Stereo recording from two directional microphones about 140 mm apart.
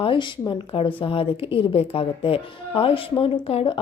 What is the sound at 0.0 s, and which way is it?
A woman's voice, 35° left (ahead or behind).